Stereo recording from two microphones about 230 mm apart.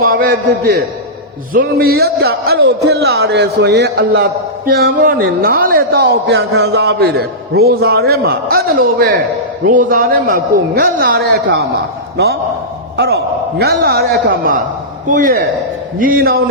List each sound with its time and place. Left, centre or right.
0.1 s a man's voice: right
13.6 s a man's voice: right